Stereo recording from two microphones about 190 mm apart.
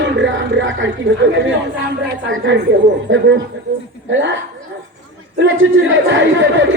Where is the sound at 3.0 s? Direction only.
75° right (ahead or behind).